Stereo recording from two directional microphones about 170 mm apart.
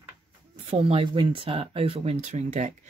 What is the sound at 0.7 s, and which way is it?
Speech, 40° right (ahead or behind).